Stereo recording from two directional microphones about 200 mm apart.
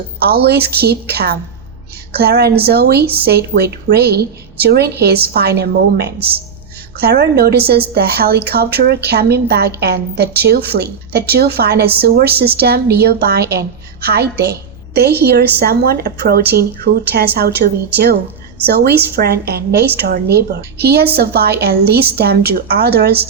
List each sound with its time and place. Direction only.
0.2 s a woman's voice: 50° right (ahead or behind)